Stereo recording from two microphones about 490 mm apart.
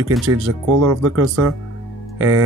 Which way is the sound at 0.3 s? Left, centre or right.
Right.